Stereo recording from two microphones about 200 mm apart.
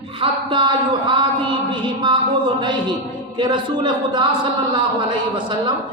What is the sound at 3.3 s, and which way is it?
A woman's voice, 25° right (ahead or behind).